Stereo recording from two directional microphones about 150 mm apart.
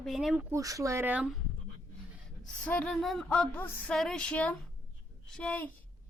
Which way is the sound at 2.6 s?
10° left (ahead or behind).